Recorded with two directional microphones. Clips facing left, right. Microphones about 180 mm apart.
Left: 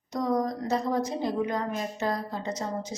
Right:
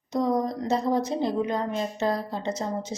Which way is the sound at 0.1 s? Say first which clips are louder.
Right 2 dB; 25° right (ahead or behind).